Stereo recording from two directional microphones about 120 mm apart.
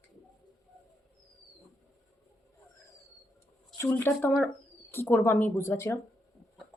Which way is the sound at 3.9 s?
15° left (ahead or behind).